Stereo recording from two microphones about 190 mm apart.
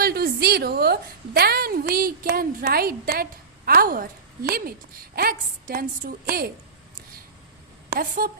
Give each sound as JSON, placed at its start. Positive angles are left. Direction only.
{"t": 0.0, "sound": "a woman's voice", "side_deg": -55}
{"t": 7.9, "sound": "a woman's voice", "side_deg": -50}